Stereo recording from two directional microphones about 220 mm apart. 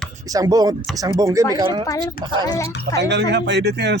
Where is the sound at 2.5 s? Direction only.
15° left (ahead or behind).